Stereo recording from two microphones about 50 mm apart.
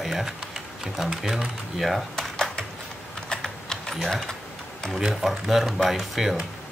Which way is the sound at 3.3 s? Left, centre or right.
Centre.